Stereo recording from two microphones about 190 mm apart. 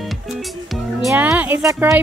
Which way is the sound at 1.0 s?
5° right (ahead or behind).